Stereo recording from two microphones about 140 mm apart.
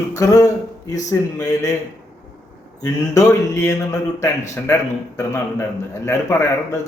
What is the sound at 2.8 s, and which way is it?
A man's voice, 20° left (ahead or behind).